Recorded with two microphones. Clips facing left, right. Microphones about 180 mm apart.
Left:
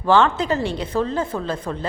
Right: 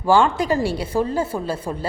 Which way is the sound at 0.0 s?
10° right (ahead or behind).